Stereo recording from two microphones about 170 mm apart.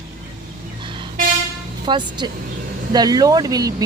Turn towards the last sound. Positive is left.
turn(degrees=-20)  # may be behind; listen again after turning